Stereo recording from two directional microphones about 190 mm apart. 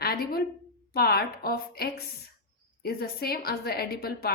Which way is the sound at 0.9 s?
55° left (ahead or behind).